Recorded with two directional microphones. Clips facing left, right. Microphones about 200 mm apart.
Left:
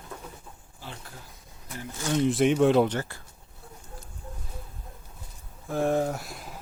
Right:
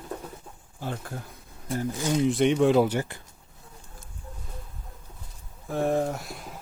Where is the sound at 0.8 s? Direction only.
50° right (ahead or behind).